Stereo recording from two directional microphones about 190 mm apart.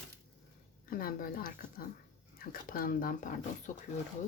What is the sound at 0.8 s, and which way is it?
Speech, 50° left (ahead or behind).